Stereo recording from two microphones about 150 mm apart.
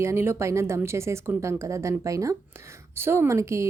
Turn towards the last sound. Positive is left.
turn(degrees=-20)  # may be behind; listen again after turning